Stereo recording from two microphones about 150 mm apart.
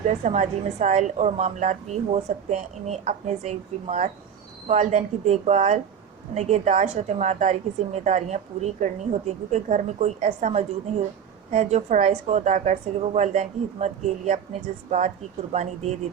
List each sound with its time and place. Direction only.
0.3 s a woman's voice: 55° right (ahead or behind)